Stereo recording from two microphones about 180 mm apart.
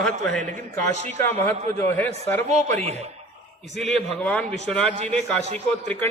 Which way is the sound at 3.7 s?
5° left (ahead or behind).